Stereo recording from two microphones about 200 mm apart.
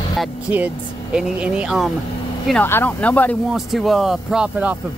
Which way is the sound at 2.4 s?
5° left (ahead or behind).